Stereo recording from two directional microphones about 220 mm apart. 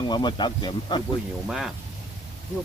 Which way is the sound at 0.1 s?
20° left (ahead or behind).